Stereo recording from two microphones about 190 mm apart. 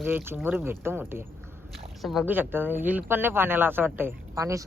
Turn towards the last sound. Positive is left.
turn(degrees=-15)  # may be behind; listen again after turning